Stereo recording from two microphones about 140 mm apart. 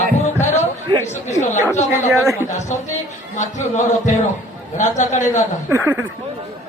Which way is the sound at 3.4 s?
60° left (ahead or behind).